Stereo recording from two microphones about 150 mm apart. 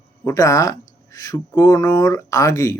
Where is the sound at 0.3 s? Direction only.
20° left (ahead or behind).